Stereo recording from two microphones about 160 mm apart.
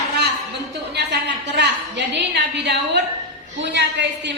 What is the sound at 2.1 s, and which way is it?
A woman's voice, 90° right.